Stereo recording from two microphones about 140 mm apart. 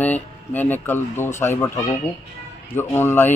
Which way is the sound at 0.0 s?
15° left (ahead or behind).